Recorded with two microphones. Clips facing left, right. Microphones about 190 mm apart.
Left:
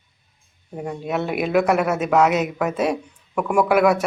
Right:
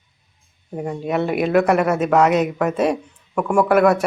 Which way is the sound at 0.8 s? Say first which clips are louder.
Right 3 dB; centre (ahead or behind).